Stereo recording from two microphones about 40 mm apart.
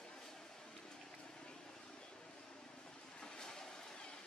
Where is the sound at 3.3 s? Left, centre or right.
Centre.